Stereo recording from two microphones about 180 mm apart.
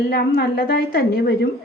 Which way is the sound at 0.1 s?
60° left (ahead or behind).